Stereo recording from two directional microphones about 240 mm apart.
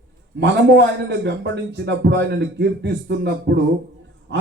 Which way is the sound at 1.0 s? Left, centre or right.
Right.